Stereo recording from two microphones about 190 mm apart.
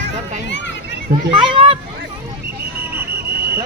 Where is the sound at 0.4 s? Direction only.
70° left (ahead or behind).